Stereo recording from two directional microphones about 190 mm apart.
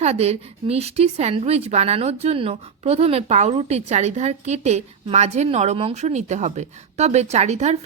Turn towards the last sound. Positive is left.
turn(degrees=-35)  # may be behind; listen again after turning